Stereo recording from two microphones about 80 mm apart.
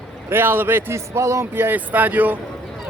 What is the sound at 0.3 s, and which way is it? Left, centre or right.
A man's voice, right.